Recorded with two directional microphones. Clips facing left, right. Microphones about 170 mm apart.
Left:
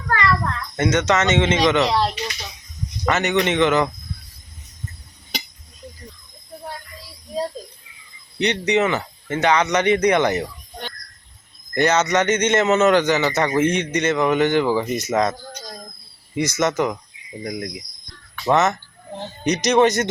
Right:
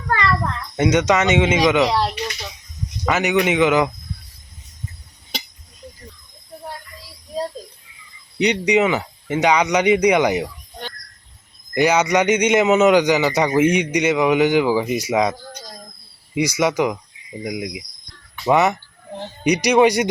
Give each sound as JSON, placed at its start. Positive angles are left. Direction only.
{"t": 0.8, "sound": "a man's voice", "side_deg": -15}
{"t": 8.4, "sound": "a man's voice", "side_deg": -10}